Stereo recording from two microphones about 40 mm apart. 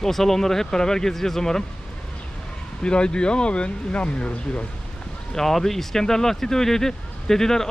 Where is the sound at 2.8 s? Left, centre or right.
Left.